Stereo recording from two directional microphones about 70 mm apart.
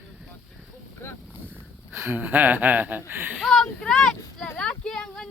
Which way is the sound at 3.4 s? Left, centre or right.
Centre.